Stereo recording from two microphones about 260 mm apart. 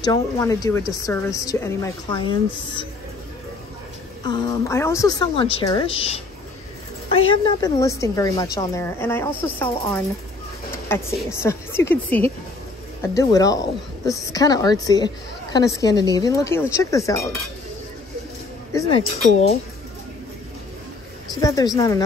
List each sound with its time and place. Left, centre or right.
0.0 s speech: centre
4.2 s speech: centre
18.7 s speech: centre
21.4 s speech: centre